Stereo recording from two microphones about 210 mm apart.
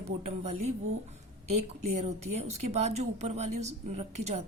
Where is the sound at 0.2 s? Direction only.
30° right (ahead or behind).